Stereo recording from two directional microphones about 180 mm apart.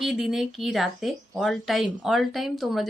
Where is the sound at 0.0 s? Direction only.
Centre (ahead or behind).